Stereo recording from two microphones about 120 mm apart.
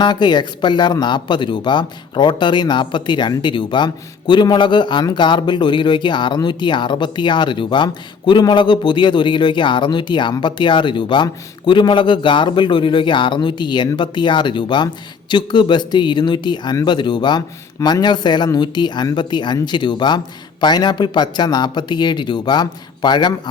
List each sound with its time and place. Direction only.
0.0 s a man's voice: 40° left (ahead or behind)